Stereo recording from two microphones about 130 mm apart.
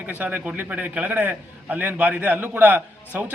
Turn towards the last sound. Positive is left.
turn(degrees=-15)  # may be behind; listen again after turning